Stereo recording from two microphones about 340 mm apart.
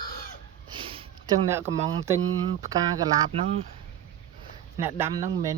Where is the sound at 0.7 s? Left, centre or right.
Centre.